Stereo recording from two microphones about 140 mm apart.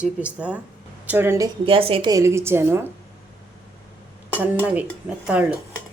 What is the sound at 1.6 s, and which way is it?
Speech, 40° right (ahead or behind).